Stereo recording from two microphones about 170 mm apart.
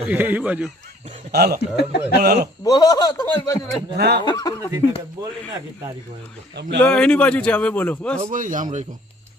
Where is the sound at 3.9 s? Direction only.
70° right (ahead or behind).